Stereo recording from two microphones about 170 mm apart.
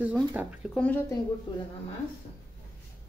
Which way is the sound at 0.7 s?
10° left (ahead or behind).